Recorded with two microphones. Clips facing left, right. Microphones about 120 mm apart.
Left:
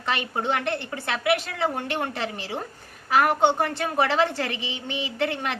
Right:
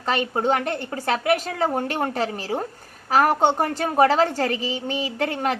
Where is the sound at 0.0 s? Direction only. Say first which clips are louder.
Right 5 dB; 40° right (ahead or behind).